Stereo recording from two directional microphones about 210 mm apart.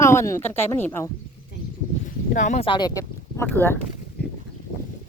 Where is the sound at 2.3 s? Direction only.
35° left (ahead or behind).